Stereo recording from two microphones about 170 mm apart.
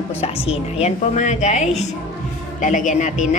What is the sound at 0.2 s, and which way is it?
A woman's voice, 35° left (ahead or behind).